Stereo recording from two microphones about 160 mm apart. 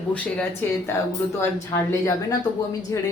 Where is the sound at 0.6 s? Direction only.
10° left (ahead or behind).